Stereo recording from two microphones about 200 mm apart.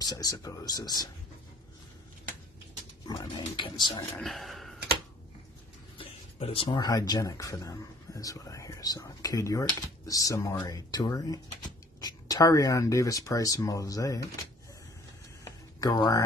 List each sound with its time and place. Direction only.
0.0 s speech: 20° left (ahead or behind)
3.1 s speech: 20° left (ahead or behind)
4.2 s speech: centre (ahead or behind)
5.9 s speech: 30° left (ahead or behind)
15.4 s a sound: 20° left (ahead or behind)